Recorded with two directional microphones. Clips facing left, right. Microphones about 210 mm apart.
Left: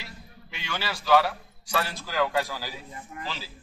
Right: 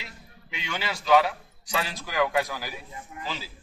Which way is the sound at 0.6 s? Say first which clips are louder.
Right 1 dB; 20° right (ahead or behind).